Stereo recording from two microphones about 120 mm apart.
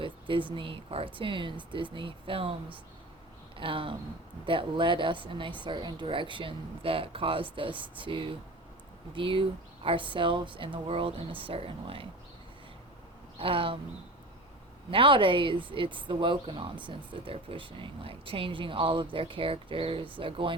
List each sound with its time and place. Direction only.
0.0 s speech: 45° right (ahead or behind)
3.6 s speech: 45° right (ahead or behind)
13.4 s speech: 50° right (ahead or behind)
14.8 s speech: 45° right (ahead or behind)